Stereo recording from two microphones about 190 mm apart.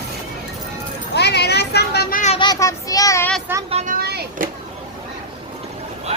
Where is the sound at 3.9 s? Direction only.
55° right (ahead or behind).